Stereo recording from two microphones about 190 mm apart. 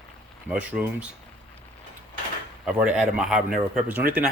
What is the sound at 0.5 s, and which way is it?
Speech, 10° right (ahead or behind).